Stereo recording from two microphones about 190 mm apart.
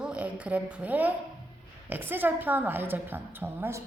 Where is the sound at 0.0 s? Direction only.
5° right (ahead or behind).